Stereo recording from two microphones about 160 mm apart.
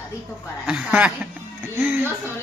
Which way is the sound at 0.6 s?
5° right (ahead or behind).